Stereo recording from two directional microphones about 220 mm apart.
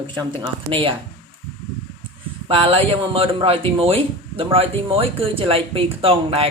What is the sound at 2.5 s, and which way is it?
A man's voice, 25° right (ahead or behind).